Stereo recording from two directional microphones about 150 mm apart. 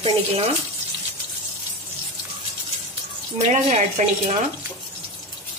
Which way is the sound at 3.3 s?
45° right (ahead or behind).